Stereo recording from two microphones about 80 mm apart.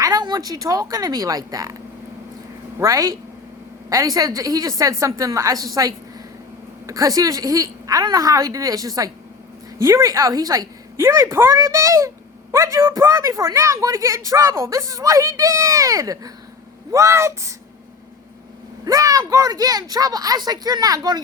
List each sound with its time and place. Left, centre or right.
0.0 s a woman's voice: right
2.7 s a woman's voice: right
18.9 s a woman's voice: right